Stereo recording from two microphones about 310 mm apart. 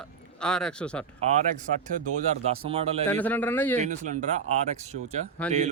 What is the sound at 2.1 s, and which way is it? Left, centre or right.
Speech, right.